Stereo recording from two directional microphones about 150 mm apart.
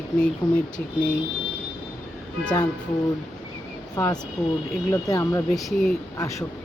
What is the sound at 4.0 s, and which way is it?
Speech, 20° left (ahead or behind).